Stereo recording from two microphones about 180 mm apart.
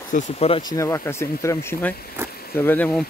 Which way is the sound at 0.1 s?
40° left (ahead or behind).